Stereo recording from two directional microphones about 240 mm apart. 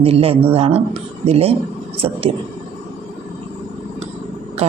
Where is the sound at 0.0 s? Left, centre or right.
Right.